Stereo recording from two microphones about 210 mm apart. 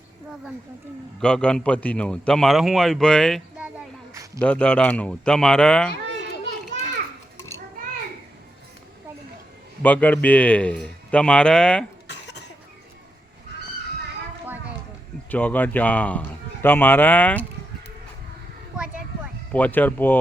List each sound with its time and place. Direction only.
1.2 s a man's voice: 5° left (ahead or behind)
9.8 s a man's voice: 5° left (ahead or behind)
12.0 s cough: 55° left (ahead or behind)
15.3 s a man's voice: 10° left (ahead or behind)
19.5 s a man's voice: 10° left (ahead or behind)